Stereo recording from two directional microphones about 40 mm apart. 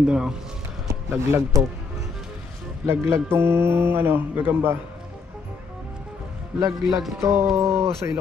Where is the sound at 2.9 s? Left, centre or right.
Right.